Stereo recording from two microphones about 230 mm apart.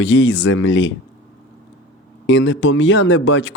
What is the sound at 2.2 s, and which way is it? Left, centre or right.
Speech, left.